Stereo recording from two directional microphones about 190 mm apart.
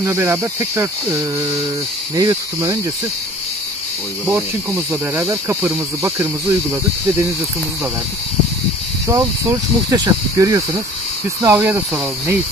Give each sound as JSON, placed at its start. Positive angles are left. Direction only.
{"t": 0.0, "sound": "speech", "side_deg": -15}
{"t": 4.3, "sound": "speech", "side_deg": -10}
{"t": 9.0, "sound": "speech", "side_deg": -15}